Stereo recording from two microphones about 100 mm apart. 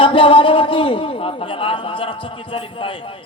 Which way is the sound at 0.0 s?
60° left (ahead or behind).